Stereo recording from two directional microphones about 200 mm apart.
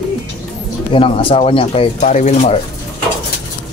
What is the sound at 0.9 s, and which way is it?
Speech, 25° left (ahead or behind).